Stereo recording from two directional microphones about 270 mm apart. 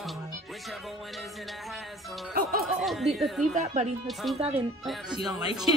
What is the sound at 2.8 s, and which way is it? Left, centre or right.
Speech, centre.